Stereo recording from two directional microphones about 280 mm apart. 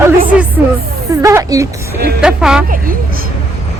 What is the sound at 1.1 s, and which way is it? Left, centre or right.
Speech, centre.